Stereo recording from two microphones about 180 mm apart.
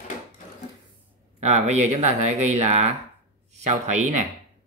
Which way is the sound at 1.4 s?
40° right (ahead or behind).